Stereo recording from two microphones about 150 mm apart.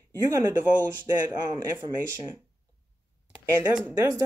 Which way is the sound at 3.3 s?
10° right (ahead or behind).